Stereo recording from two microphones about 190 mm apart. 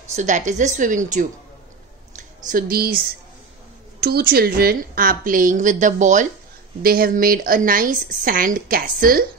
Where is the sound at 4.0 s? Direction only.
55° right (ahead or behind).